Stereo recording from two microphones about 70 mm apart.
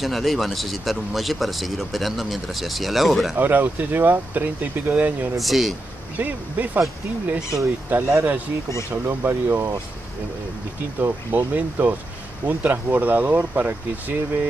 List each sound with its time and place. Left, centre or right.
0.0 s speech: centre
3.3 s speech: right
5.4 s speech: centre
6.1 s speech: right
7.9 s speech: right
11.0 s speech: right